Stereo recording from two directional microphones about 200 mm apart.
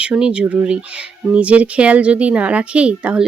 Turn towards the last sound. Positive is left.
turn(degrees=-5)  # may be behind; listen again after turning